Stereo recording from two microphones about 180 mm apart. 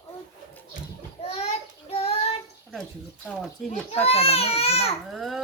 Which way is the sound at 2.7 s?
Centre (ahead or behind).